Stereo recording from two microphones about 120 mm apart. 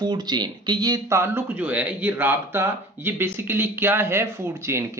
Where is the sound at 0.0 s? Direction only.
35° right (ahead or behind).